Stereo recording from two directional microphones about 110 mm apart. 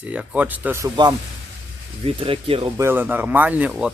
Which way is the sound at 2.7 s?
20° right (ahead or behind).